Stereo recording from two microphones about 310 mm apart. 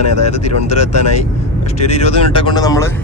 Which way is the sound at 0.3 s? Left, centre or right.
Left.